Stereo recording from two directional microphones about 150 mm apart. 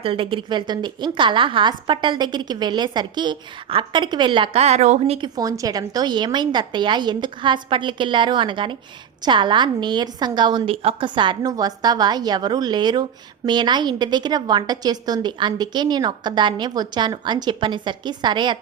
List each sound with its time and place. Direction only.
0.0 s speech: 35° right (ahead or behind)
5.4 s a woman's voice: 25° right (ahead or behind)